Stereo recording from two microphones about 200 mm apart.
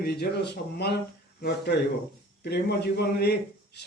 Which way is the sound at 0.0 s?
55° left (ahead or behind).